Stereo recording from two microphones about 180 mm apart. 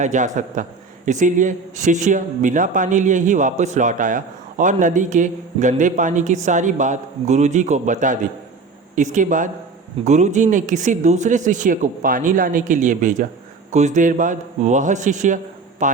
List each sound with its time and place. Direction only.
0.0 s speech: 45° right (ahead or behind)